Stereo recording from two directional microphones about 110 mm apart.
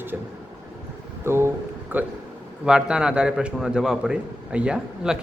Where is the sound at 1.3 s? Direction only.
20° right (ahead or behind).